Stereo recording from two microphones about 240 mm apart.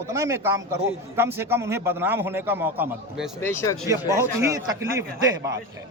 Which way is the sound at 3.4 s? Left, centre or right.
Centre.